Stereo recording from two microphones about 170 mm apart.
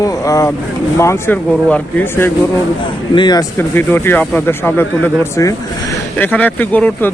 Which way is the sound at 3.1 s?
25° left (ahead or behind).